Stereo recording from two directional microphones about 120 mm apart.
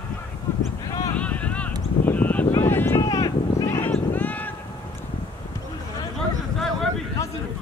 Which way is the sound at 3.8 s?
15° left (ahead or behind).